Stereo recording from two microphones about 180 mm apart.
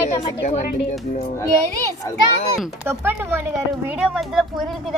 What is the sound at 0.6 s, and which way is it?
Speech, 60° left (ahead or behind).